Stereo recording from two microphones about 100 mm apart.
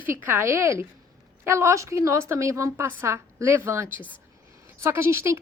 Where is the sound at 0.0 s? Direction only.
20° right (ahead or behind).